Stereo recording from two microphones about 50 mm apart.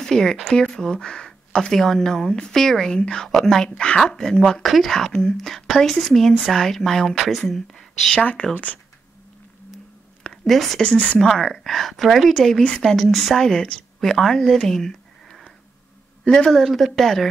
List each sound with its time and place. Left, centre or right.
0.0 s speech: centre
8.2 s a woman's voice: left
10.4 s speech: centre
10.8 s a woman's voice: left
11.1 s speech: centre
14.7 s a sound: centre
16.3 s speech: centre
16.5 s speech: centre